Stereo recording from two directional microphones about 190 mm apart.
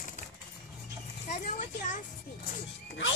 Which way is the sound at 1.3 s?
40° left (ahead or behind).